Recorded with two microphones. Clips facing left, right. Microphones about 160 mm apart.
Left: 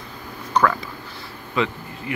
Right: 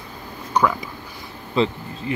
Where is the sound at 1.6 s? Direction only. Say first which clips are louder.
Right 3 dB; 30° right (ahead or behind).